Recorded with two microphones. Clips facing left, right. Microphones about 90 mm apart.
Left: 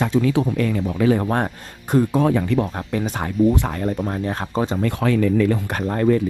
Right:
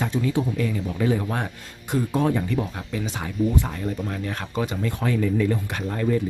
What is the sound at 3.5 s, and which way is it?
Speech, 70° left (ahead or behind).